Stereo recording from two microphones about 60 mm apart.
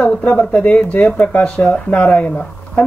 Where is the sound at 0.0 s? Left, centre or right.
Centre.